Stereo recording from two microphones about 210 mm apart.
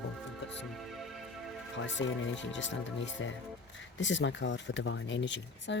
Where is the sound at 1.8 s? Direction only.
60° left (ahead or behind).